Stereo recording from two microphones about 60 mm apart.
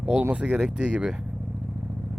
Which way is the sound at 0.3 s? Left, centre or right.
Centre.